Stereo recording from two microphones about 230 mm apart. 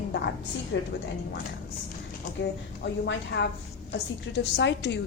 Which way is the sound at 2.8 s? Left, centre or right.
Left.